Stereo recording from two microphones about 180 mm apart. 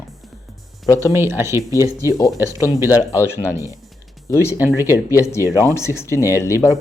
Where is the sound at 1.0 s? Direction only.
15° right (ahead or behind).